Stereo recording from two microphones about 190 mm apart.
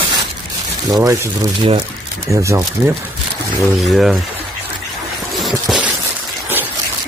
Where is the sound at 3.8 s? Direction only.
Centre (ahead or behind).